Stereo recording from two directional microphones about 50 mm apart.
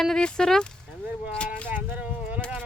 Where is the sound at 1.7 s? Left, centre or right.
Right.